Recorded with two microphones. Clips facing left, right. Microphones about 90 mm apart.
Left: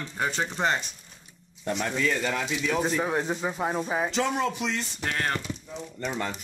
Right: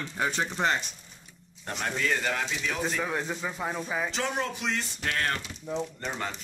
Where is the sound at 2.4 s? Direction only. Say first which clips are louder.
Left 4 dB; 15° left (ahead or behind).